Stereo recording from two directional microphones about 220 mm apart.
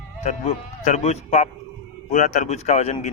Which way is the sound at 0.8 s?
30° left (ahead or behind).